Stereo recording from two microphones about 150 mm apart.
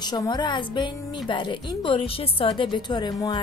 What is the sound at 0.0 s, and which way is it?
Speech, 25° left (ahead or behind).